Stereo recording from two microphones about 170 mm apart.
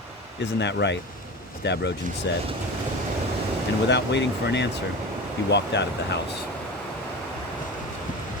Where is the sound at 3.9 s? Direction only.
90° left.